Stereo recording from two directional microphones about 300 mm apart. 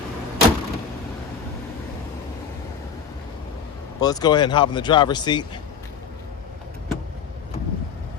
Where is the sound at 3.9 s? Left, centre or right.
Centre.